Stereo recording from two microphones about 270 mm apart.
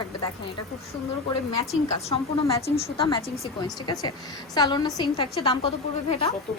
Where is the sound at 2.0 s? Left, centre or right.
Left.